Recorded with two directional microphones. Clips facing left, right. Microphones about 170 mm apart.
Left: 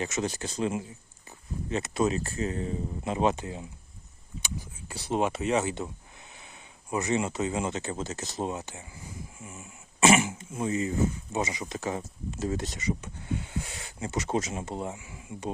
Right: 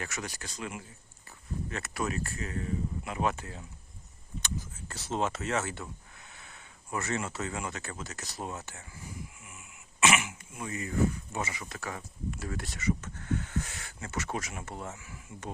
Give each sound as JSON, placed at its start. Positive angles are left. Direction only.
{"t": 0.0, "sound": "speech", "side_deg": 25}